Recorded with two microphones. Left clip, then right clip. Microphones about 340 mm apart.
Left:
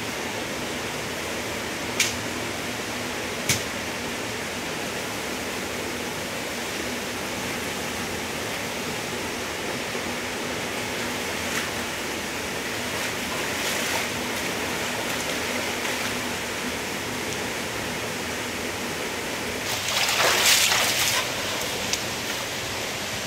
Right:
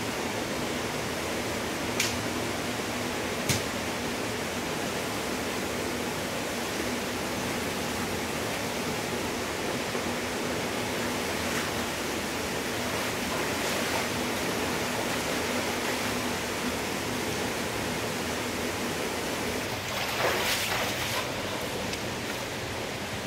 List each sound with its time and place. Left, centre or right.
20.2 s boat: centre